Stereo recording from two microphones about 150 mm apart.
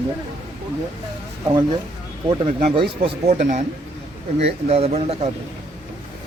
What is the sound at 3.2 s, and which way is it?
Speech, 50° right (ahead or behind).